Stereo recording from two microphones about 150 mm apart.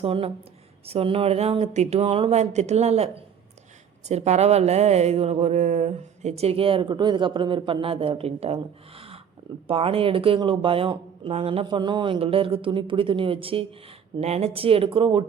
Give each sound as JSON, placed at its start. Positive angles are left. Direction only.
{"t": 0.0, "sound": "speech", "side_deg": -40}
{"t": 4.1, "sound": "speech", "side_deg": -45}